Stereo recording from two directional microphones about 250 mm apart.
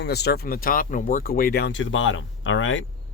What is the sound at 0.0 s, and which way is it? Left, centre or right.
Speech, left.